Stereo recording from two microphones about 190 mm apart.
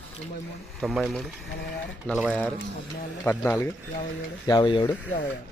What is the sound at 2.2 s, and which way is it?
Speech, 5° left (ahead or behind).